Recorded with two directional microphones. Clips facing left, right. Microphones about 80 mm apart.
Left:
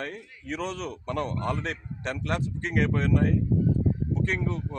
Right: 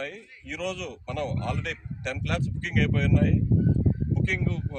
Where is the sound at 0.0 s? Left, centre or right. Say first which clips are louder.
Even; left.